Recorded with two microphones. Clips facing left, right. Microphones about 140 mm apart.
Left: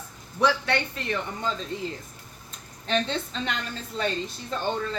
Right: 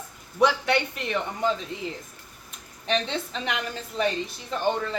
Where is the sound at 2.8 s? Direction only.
10° right (ahead or behind).